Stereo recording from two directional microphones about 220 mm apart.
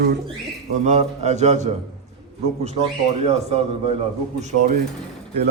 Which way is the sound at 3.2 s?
30° right (ahead or behind).